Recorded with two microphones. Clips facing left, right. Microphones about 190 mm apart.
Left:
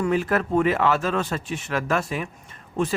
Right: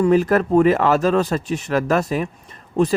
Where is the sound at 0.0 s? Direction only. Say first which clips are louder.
Right 7 dB; 40° right (ahead or behind).